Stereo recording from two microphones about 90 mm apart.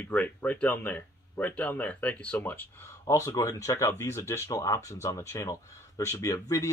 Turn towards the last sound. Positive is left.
turn(degrees=35)  # may be behind; listen again after turning